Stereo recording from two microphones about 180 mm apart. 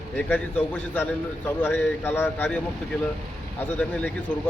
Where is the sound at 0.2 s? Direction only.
10° left (ahead or behind).